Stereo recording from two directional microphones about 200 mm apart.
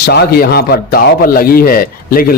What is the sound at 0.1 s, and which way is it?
A man's voice, 50° left (ahead or behind).